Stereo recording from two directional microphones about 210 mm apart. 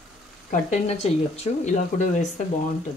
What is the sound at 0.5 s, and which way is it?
Speech, 35° left (ahead or behind).